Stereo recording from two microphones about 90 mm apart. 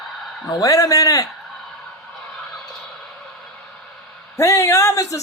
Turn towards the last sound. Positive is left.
turn(degrees=35)  # may be behind; listen again after turning